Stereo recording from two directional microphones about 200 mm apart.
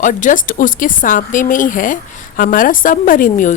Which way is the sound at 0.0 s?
40° left (ahead or behind).